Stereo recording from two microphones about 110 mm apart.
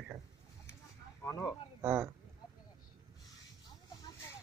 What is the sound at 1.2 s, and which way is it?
Speech, 30° left (ahead or behind).